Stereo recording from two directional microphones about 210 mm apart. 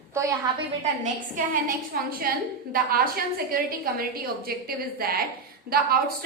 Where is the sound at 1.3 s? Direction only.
40° right (ahead or behind).